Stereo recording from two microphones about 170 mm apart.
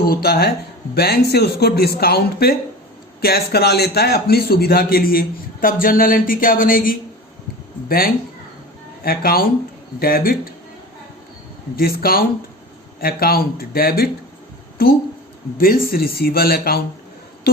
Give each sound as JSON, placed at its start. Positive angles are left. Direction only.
{"t": 0.1, "sound": "a man's voice", "side_deg": 65}
{"t": 11.8, "sound": "a man's voice", "side_deg": 60}
{"t": 15.5, "sound": "a man's voice", "side_deg": 60}